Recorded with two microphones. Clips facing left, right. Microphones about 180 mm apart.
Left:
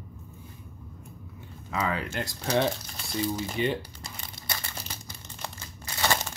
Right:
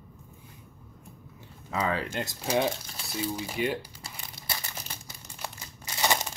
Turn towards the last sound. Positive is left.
turn(degrees=-15)  # may be behind; listen again after turning